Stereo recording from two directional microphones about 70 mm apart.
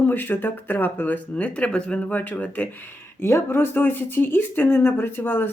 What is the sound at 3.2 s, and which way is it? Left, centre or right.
Speech, left.